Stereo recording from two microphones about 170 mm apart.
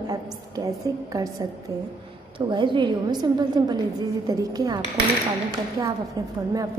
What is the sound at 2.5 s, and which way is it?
A woman's voice, 25° right (ahead or behind).